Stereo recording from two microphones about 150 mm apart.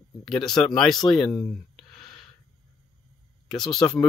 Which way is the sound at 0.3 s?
5° left (ahead or behind).